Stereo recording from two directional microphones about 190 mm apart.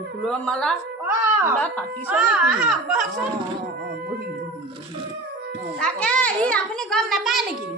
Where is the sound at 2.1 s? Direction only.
5° right (ahead or behind).